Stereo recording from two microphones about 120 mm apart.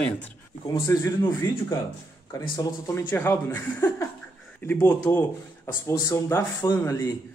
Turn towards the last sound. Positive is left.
turn(degrees=25)  # may be behind; listen again after turning